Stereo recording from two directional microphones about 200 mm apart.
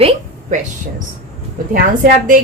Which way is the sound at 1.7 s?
45° right (ahead or behind).